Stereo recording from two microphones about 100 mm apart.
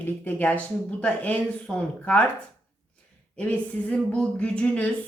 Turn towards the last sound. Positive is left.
turn(degrees=10)  # may be behind; listen again after turning